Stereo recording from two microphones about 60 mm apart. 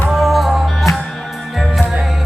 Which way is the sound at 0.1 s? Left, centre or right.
Centre.